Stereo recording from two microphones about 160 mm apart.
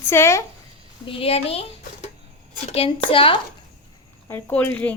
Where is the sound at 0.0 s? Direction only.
15° left (ahead or behind).